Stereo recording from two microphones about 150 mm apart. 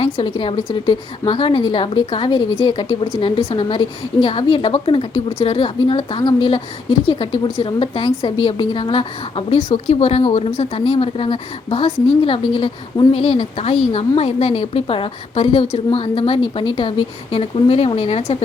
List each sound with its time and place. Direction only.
0.0 s a woman's voice: 35° left (ahead or behind)